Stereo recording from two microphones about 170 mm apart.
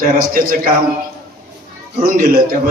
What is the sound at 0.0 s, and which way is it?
Speech, 55° right (ahead or behind).